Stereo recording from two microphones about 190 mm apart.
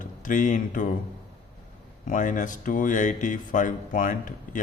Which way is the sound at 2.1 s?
40° left (ahead or behind).